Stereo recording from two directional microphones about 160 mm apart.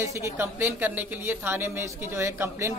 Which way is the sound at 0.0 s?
15° right (ahead or behind).